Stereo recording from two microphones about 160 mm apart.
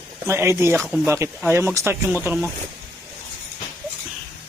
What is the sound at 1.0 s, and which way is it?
A man's voice, 15° right (ahead or behind).